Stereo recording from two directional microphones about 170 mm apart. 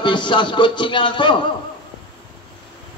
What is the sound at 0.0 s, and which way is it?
A man's voice, 30° left (ahead or behind).